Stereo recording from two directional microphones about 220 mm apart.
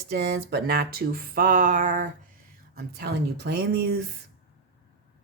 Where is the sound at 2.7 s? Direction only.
45° right (ahead or behind).